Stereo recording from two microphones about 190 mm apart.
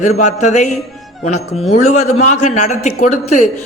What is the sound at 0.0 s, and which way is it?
A man's voice, 40° left (ahead or behind).